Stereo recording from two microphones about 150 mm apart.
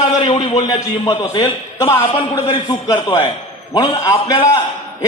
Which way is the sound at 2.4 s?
30° left (ahead or behind).